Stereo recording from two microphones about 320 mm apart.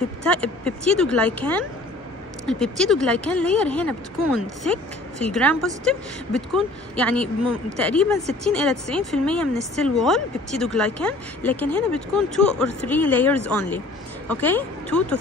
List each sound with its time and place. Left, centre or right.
0.3 s speech: centre